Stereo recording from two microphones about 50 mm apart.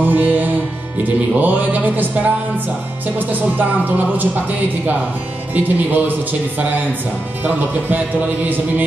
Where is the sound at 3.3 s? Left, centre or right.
Right.